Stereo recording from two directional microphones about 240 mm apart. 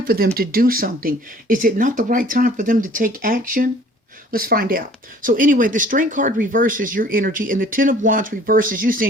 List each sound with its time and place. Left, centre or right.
0.3 s speech: right